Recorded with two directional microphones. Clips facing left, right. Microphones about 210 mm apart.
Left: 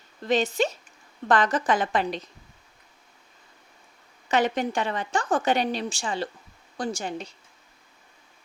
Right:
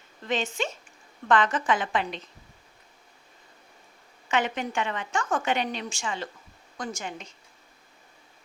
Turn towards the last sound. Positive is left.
turn(degrees=35)  # may be behind; listen again after turning